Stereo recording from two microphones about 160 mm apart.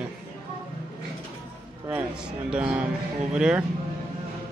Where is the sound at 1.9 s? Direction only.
10° right (ahead or behind).